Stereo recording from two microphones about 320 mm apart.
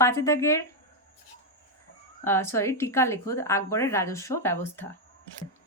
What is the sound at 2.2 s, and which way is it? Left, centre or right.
A woman's voice, centre.